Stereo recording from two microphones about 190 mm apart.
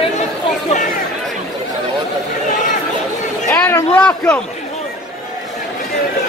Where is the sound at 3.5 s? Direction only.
10° left (ahead or behind).